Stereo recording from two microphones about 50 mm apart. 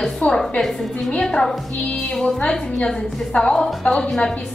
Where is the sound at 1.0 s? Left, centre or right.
Centre.